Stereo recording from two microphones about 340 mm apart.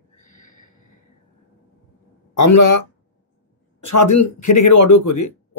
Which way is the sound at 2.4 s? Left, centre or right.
Left.